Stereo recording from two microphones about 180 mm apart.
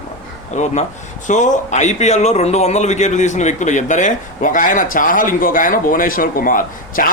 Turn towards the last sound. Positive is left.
turn(degrees=50)  # may be behind; listen again after turning